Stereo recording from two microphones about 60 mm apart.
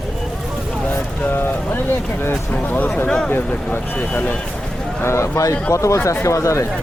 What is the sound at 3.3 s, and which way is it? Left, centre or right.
Speech, left.